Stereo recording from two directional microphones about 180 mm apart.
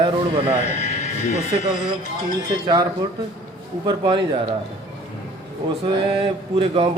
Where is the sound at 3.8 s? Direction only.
25° right (ahead or behind).